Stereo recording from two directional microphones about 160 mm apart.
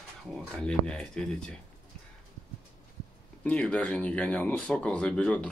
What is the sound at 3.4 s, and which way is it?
Speech, 10° left (ahead or behind).